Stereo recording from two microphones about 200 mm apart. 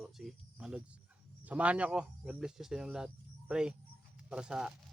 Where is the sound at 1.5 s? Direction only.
5° right (ahead or behind).